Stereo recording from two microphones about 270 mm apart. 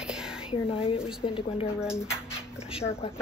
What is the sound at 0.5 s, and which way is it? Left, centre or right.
Speech, left.